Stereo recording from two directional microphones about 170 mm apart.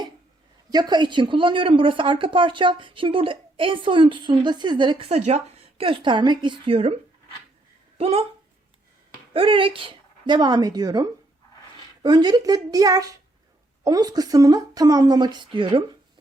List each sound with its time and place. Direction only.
0.7 s speech: 25° right (ahead or behind)
7.9 s speech: 35° right (ahead or behind)
9.3 s speech: 30° right (ahead or behind)